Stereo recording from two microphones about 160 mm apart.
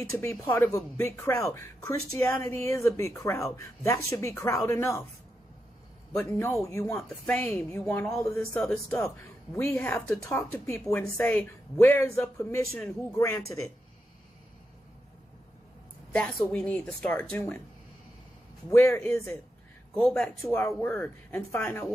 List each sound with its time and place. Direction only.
0.1 s speech: 15° left (ahead or behind)
6.1 s speech: 15° left (ahead or behind)
16.1 s speech: 5° left (ahead or behind)
18.7 s speech: 15° left (ahead or behind)